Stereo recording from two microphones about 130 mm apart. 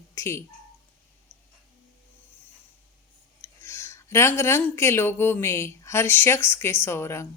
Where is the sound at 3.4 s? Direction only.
20° left (ahead or behind).